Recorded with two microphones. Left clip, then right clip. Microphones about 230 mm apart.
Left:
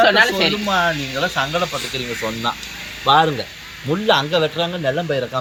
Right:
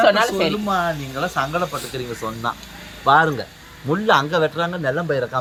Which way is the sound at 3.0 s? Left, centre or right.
Centre.